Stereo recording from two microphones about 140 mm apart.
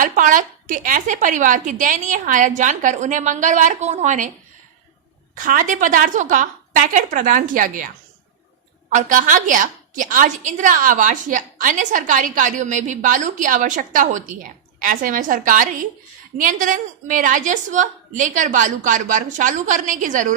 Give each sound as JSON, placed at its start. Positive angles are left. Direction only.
{"t": 0.0, "sound": "a woman's voice", "side_deg": -70}
{"t": 5.3, "sound": "a woman's voice", "side_deg": -75}
{"t": 8.9, "sound": "a woman's voice", "side_deg": -65}